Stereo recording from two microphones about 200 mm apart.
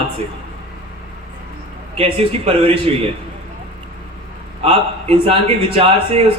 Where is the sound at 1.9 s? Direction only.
30° right (ahead or behind).